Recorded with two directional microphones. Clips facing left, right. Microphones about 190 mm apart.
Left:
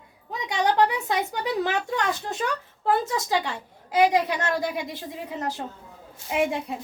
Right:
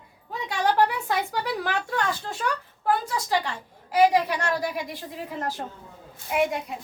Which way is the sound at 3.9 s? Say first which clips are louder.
Right 1 dB; 20° left (ahead or behind).